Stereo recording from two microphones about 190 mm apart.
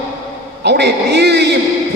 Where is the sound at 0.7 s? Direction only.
60° right (ahead or behind).